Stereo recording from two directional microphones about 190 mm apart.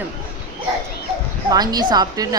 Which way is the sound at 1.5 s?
20° right (ahead or behind).